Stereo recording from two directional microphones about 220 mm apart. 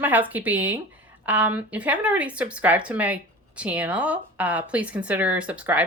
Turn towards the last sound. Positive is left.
turn(degrees=-5)  # may be behind; listen again after turning